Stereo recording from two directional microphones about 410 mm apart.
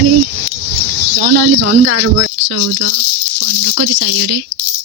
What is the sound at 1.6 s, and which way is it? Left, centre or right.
Speech, right.